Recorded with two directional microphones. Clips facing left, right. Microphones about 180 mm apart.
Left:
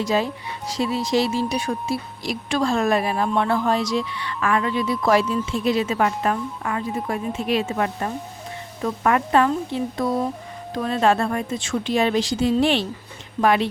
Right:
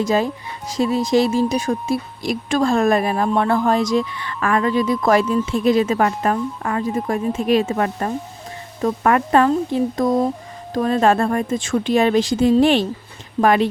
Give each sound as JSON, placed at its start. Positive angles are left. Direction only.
{"t": 0.0, "sound": "speech", "side_deg": -45}